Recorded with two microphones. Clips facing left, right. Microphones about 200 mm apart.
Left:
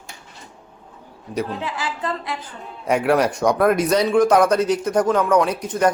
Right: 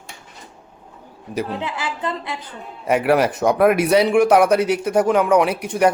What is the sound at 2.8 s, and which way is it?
Speech, 5° right (ahead or behind).